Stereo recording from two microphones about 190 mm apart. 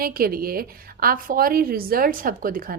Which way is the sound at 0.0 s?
50° right (ahead or behind).